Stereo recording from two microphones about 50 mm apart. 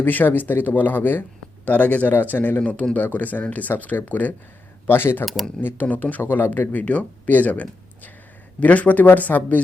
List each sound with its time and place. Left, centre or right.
0.0 s speech: left
2.6 s a man's voice: left
4.9 s speech: left
5.2 s speech: centre
5.6 s speech: left